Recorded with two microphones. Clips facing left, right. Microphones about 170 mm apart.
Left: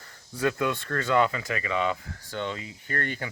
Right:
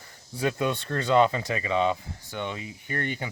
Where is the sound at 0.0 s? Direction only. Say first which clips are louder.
Left 1 dB; 15° right (ahead or behind).